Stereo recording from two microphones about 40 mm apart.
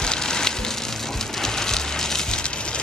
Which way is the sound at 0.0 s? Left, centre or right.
Centre.